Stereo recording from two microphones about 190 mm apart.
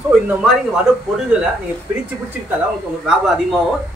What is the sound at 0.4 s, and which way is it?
Speech, 5° right (ahead or behind).